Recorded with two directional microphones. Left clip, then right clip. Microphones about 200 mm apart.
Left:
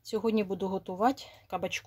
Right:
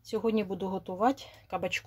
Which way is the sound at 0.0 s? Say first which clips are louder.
Even; 20° left (ahead or behind).